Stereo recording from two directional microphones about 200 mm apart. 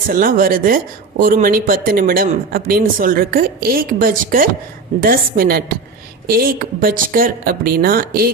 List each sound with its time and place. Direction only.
0.1 s speech: 45° right (ahead or behind)